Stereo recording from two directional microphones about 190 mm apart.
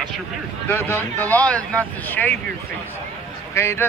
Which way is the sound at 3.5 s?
15° left (ahead or behind).